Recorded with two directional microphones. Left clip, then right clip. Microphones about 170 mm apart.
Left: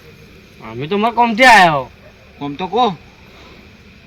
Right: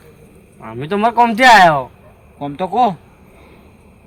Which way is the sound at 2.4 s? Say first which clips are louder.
Right 1 dB; 30° right (ahead or behind).